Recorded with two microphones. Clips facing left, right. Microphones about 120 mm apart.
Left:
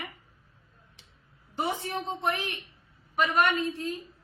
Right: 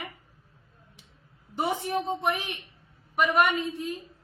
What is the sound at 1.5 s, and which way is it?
A woman's voice, 15° right (ahead or behind).